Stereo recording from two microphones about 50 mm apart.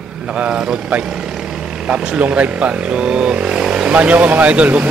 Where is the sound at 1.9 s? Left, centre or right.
Right.